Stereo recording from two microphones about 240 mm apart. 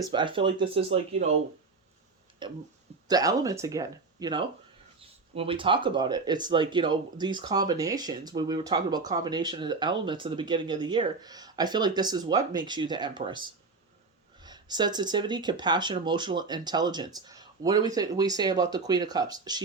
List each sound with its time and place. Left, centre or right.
0.0 s speech: centre
2.4 s speech: centre